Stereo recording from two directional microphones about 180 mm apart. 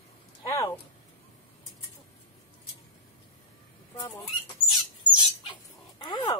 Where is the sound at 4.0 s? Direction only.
20° left (ahead or behind).